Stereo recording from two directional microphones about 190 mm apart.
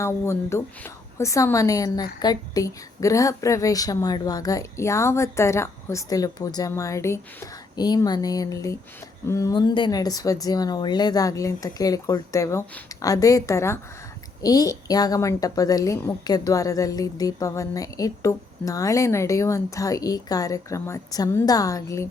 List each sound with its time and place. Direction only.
0.0 s a woman's voice: 15° left (ahead or behind)